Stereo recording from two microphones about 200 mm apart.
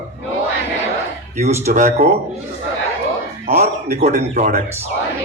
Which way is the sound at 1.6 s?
40° right (ahead or behind).